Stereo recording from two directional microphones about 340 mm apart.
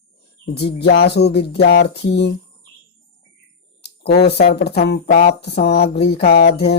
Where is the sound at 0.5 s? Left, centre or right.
Left.